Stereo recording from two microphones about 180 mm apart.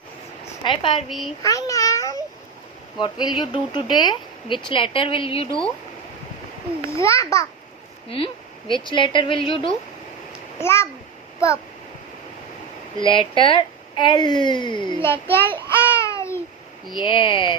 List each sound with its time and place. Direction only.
0.6 s speech: 30° left (ahead or behind)
1.0 s a child's voice: centre (ahead or behind)
1.4 s a sound: 20° left (ahead or behind)
3.0 s speech: 25° left (ahead or behind)
6.9 s a child's voice: 15° left (ahead or behind)
8.1 s speech: 30° left (ahead or behind)
10.6 s a child's voice: 15° left (ahead or behind)
11.3 s a sound: 15° left (ahead or behind)
13.0 s speech: 25° left (ahead or behind)
15.0 s child singing: 10° left (ahead or behind)
16.9 s speech: 25° left (ahead or behind)